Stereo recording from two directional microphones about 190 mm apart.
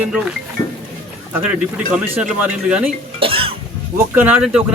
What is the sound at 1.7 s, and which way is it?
Speech, 5° right (ahead or behind).